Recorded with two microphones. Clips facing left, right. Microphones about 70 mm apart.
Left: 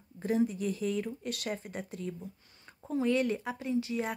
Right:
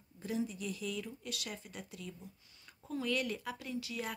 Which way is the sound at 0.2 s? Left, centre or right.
Left.